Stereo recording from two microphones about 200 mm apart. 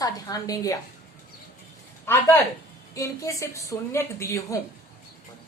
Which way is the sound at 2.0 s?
10° left (ahead or behind).